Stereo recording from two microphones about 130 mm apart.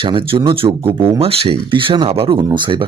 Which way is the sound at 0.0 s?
40° right (ahead or behind).